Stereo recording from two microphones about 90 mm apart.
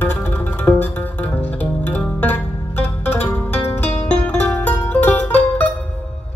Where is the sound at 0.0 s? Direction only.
20° left (ahead or behind).